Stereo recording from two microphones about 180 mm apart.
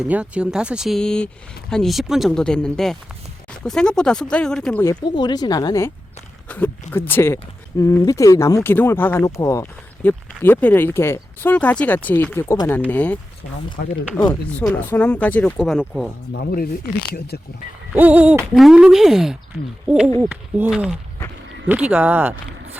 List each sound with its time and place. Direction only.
0.0 s speech: 5° right (ahead or behind)
4.8 s speech: 20° left (ahead or behind)
14.6 s speech: 10° left (ahead or behind)
16.3 s speech: 65° left (ahead or behind)
17.9 s speech: 10° right (ahead or behind)